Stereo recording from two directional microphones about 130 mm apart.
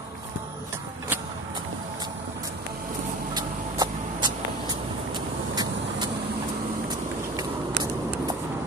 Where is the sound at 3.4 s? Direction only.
30° right (ahead or behind).